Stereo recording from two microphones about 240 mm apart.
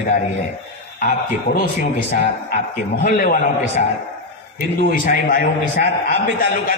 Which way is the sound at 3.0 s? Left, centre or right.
Left.